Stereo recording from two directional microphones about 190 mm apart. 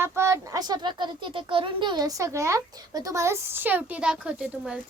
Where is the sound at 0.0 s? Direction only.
15° right (ahead or behind).